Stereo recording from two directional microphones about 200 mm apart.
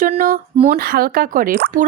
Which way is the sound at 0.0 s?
45° right (ahead or behind).